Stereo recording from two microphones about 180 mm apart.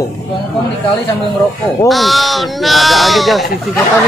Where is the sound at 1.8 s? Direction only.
Centre (ahead or behind).